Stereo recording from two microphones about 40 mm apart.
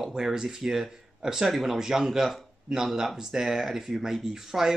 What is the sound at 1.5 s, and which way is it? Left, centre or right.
Speech, centre.